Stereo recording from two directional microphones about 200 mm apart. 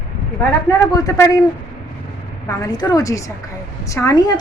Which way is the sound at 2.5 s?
20° left (ahead or behind).